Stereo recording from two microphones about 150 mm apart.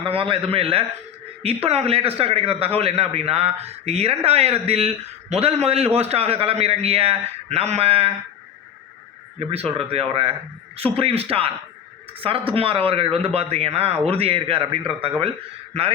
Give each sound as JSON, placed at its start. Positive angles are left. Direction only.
{"t": 0.0, "sound": "a man's voice", "side_deg": -35}
{"t": 9.5, "sound": "a man's voice", "side_deg": -40}